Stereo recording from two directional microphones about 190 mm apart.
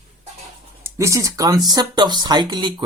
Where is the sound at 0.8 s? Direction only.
15° right (ahead or behind).